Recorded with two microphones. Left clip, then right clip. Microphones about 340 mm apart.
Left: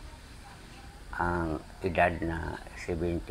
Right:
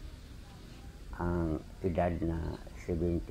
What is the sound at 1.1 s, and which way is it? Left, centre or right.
Speech, left.